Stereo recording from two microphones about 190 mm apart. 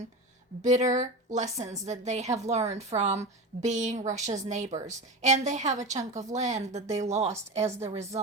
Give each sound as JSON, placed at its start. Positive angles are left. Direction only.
{"t": 0.6, "sound": "a woman's voice", "side_deg": -40}